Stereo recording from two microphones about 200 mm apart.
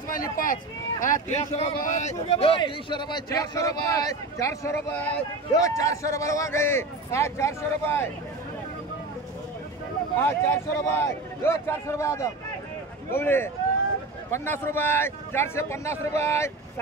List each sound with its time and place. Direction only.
0.1 s a man's voice: 45° left (ahead or behind); by 8.1 s 10° left (ahead or behind)
10.1 s a man's voice: 15° left (ahead or behind)